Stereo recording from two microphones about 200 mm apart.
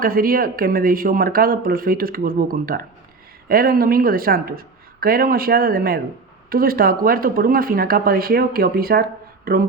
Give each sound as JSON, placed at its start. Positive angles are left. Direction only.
{"t": 0.0, "sound": "speech", "side_deg": -45}